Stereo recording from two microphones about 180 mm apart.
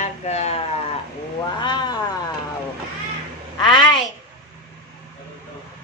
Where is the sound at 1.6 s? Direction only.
25° left (ahead or behind).